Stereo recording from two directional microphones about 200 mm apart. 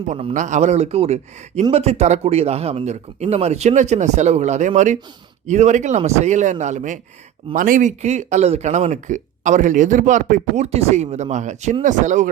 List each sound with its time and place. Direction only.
0.1 s speech: 30° right (ahead or behind)